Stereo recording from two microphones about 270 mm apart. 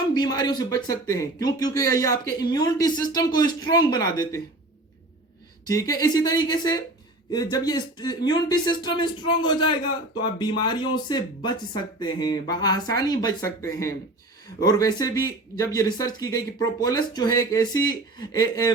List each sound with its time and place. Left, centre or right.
0.1 s speech: centre
5.6 s speech: centre